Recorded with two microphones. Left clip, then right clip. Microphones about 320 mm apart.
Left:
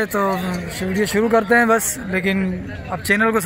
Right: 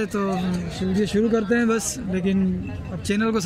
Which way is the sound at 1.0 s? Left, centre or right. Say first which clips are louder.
Left 5 dB; left.